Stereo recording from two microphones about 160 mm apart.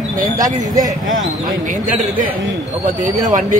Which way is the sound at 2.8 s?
55° right (ahead or behind).